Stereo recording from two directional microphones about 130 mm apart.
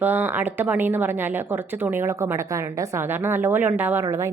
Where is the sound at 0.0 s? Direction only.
15° right (ahead or behind).